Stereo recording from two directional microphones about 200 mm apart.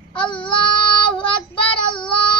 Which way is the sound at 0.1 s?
25° left (ahead or behind).